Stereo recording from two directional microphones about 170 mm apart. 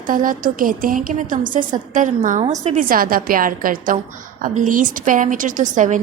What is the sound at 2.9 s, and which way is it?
A woman's voice, 55° right (ahead or behind).